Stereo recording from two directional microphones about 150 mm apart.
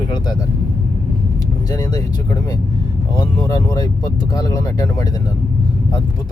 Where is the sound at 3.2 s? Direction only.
25° left (ahead or behind).